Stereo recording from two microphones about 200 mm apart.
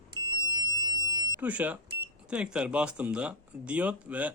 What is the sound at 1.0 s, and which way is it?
Smoke detector, 20° right (ahead or behind).